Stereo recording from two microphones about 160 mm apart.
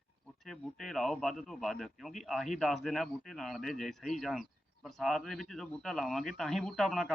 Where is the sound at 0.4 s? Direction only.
Centre (ahead or behind).